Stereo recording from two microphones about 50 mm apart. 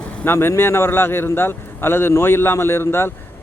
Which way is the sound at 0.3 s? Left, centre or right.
Left.